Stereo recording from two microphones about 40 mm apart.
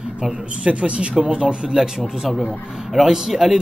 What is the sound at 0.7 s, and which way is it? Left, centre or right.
A man's voice, right.